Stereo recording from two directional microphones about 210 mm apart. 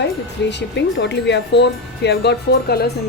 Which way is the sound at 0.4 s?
55° left (ahead or behind).